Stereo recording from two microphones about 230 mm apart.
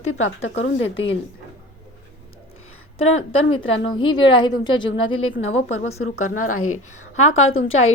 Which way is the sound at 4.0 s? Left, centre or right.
Centre.